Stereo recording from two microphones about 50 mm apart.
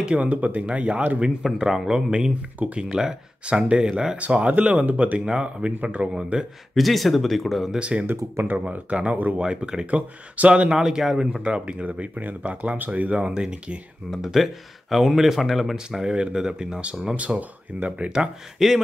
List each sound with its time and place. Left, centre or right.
0.0 s speech: right
1.4 s speech: centre
4.2 s speech: right
5.2 s speech: centre
5.7 s speech: right
6.7 s speech: centre
7.8 s speech: right
9.4 s speech: centre
10.7 s speech: centre
14.1 s speech: centre
17.4 s speech: right
18.1 s speech: centre